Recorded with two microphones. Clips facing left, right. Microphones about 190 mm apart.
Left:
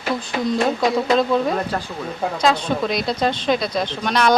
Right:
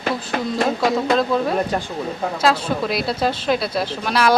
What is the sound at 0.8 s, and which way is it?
A woman's voice, centre (ahead or behind).